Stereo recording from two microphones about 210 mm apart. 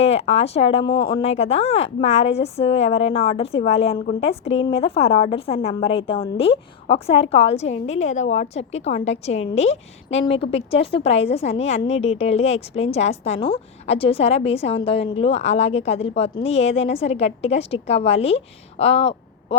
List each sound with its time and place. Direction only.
0.0 s a woman's voice: 30° left (ahead or behind)